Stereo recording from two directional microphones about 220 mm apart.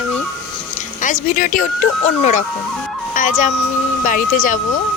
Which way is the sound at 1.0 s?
35° left (ahead or behind).